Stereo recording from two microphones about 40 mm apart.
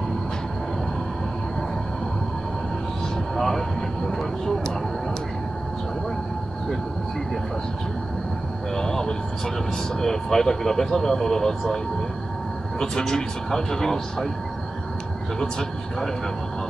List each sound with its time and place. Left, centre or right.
3.3 s vehicle: centre
8.7 s speech: centre